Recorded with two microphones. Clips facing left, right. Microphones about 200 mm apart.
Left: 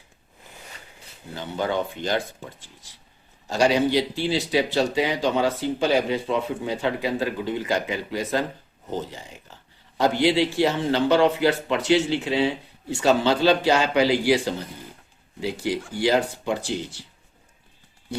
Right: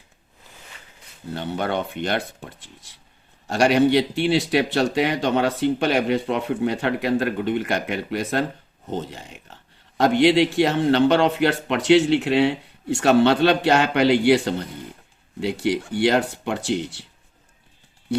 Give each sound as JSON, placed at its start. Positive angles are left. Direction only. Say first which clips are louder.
{"t": 1.3, "sound": "speech", "louder": "right 1 dB", "side_deg": -65}